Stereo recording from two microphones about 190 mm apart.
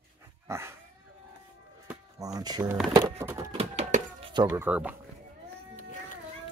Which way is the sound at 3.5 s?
35° right (ahead or behind).